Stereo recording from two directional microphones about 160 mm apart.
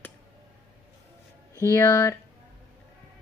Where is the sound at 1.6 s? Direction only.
15° left (ahead or behind).